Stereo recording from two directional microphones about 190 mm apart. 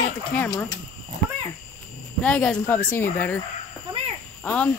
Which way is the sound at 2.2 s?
5° left (ahead or behind).